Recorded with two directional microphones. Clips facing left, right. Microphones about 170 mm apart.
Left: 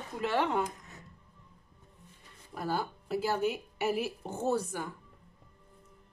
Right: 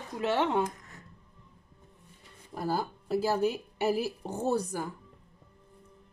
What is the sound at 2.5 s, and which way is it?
Speech, 35° right (ahead or behind).